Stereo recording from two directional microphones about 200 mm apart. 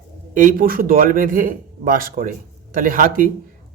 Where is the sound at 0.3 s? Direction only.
45° right (ahead or behind).